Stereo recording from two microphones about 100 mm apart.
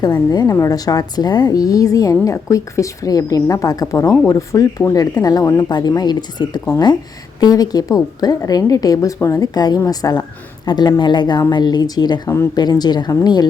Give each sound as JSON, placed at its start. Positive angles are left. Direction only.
{"t": 0.0, "sound": "a woman's voice", "side_deg": 40}
{"t": 9.6, "sound": "a woman's voice", "side_deg": 40}